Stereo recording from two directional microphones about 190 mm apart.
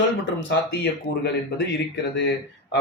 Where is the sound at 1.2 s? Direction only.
60° left (ahead or behind).